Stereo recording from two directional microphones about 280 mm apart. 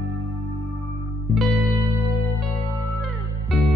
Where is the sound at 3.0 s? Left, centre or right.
Centre.